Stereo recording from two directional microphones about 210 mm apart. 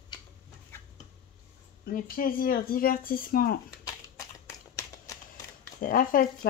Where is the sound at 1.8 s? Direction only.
45° left (ahead or behind).